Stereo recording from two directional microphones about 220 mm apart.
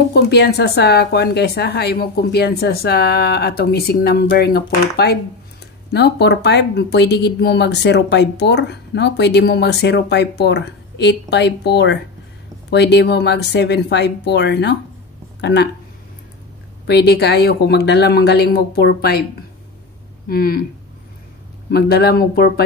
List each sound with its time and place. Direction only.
0.1 s speech: 50° left (ahead or behind)
16.8 s speech: 45° left (ahead or behind)
20.2 s speech: 40° left (ahead or behind)
21.6 s speech: 45° left (ahead or behind)